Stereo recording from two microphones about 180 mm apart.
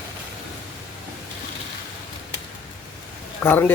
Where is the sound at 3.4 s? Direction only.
10° left (ahead or behind).